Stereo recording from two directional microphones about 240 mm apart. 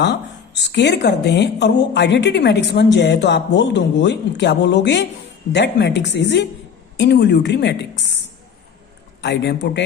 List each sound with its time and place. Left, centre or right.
0.7 s a woman's voice: left
9.2 s a woman's voice: left